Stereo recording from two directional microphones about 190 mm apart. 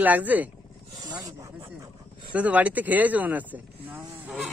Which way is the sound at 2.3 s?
5° right (ahead or behind).